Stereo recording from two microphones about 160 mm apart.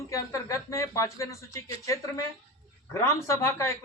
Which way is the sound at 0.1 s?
20° left (ahead or behind).